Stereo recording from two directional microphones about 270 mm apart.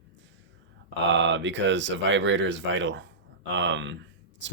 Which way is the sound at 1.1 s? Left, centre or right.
Right.